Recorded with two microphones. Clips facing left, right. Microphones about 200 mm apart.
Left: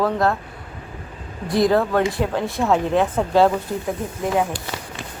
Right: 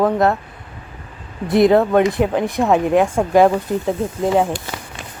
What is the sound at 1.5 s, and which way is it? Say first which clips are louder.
Mantra: right 5 dB; 20° right (ahead or behind).